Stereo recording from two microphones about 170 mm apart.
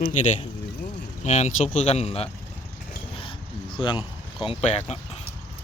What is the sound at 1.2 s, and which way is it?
Speech, 40° left (ahead or behind).